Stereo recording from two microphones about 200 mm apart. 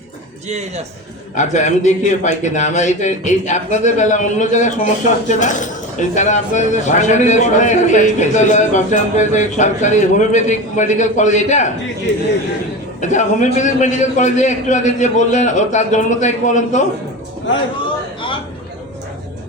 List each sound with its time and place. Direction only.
1.4 s a man's voice: 35° left (ahead or behind)
13.0 s a man's voice: 35° left (ahead or behind)